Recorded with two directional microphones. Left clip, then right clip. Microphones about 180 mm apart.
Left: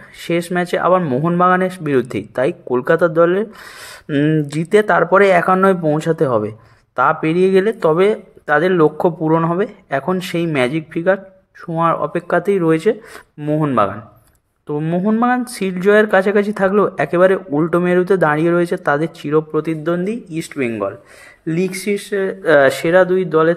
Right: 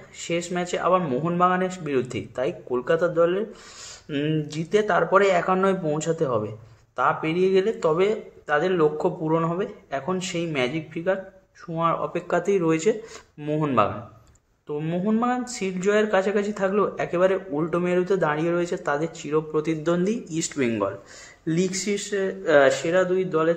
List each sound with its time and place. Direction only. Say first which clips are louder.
0.2 s speech: left 8 dB; 35° left (ahead or behind)